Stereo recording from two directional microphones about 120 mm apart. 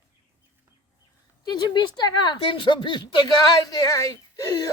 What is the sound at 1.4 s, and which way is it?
A woman's voice, 35° left (ahead or behind).